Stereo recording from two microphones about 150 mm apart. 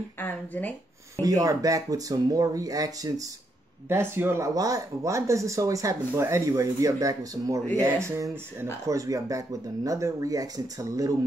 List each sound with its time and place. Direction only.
0.2 s speech: 10° left (ahead or behind)
1.2 s speech: 25° right (ahead or behind)